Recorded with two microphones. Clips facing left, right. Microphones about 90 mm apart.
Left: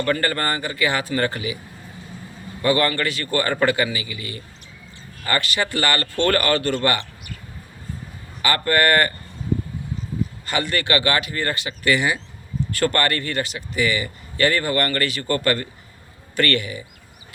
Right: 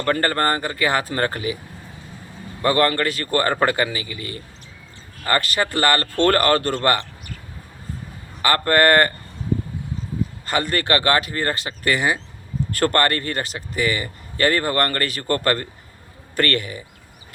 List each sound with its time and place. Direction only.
0.0 s a man's voice: 40° right (ahead or behind)
2.6 s a man's voice: 40° right (ahead or behind)
8.4 s a man's voice: 40° right (ahead or behind)
10.4 s a man's voice: 40° right (ahead or behind)